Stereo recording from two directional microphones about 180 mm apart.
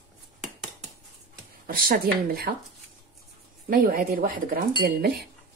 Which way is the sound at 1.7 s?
55° right (ahead or behind).